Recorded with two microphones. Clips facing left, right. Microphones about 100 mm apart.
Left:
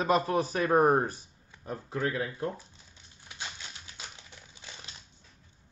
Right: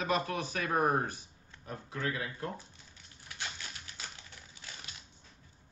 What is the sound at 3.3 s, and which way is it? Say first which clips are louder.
Typewriter: even; 20° left (ahead or behind).